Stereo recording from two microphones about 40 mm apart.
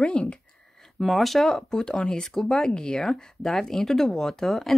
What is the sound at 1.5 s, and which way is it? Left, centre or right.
Speech, centre.